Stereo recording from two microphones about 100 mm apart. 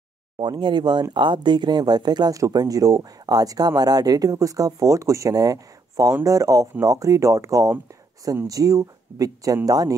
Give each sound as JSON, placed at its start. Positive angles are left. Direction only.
{"t": 0.4, "sound": "speech", "side_deg": -50}